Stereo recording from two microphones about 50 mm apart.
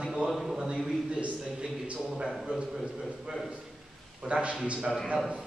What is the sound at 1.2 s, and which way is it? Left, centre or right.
Speech, right.